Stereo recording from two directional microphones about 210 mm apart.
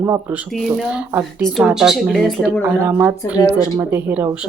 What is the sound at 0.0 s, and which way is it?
Speech, 10° right (ahead or behind).